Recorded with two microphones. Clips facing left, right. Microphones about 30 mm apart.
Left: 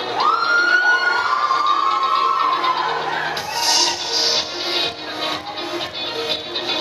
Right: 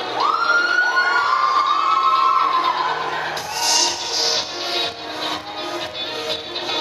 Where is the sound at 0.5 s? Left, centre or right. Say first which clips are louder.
Left 2 dB; centre.